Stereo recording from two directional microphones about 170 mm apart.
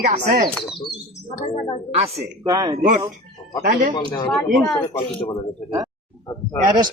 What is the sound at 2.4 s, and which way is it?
Speech, 20° right (ahead or behind).